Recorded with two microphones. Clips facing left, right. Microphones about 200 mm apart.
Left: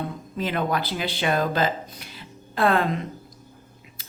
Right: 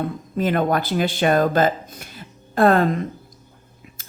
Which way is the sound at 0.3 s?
50° right (ahead or behind).